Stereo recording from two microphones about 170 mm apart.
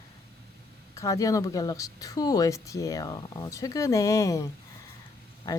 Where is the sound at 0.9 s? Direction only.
20° left (ahead or behind).